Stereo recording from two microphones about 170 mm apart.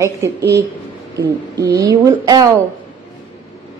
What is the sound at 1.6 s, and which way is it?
Speech, 20° right (ahead or behind).